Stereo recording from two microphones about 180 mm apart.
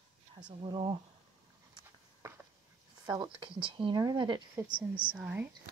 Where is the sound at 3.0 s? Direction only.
25° right (ahead or behind).